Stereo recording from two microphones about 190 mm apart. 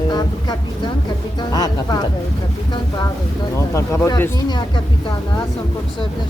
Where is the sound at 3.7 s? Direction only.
15° left (ahead or behind).